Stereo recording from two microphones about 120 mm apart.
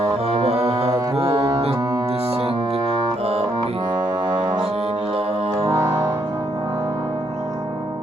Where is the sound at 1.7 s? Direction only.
30° right (ahead or behind).